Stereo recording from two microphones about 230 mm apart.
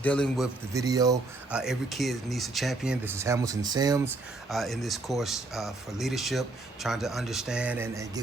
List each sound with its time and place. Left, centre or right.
0.0 s speech: centre
0.7 s speech: centre
1.5 s speech: centre
4.4 s speech: centre